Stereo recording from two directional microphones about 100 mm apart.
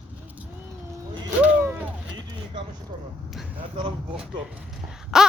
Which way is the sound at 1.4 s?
20° right (ahead or behind).